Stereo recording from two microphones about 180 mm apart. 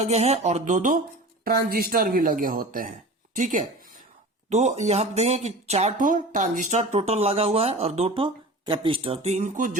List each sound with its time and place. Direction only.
0.0 s speech: 35° right (ahead or behind)
1.5 s a woman's voice: 55° right (ahead or behind)